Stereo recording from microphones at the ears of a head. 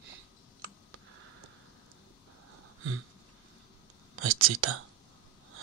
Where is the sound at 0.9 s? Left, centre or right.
Right.